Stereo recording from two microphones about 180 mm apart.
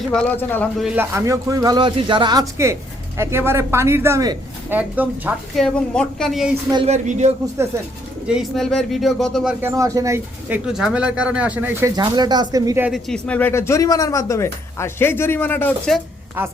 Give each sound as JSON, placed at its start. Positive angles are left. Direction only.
{"t": 0.1, "sound": "speech", "side_deg": 5}
{"t": 0.8, "sound": "speech", "side_deg": -5}
{"t": 1.1, "sound": "speech", "side_deg": -15}
{"t": 5.5, "sound": "speech", "side_deg": 5}
{"t": 6.8, "sound": "speech", "side_deg": -40}
{"t": 7.6, "sound": "speech", "side_deg": -15}
{"t": 8.3, "sound": "speech", "side_deg": 0}
{"t": 10.7, "sound": "speech", "side_deg": -5}
{"t": 12.9, "sound": "speech", "side_deg": 5}